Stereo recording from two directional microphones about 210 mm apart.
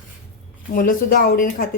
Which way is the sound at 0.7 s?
45° left (ahead or behind).